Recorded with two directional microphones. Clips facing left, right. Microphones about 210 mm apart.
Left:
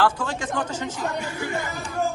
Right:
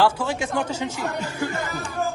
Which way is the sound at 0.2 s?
10° right (ahead or behind).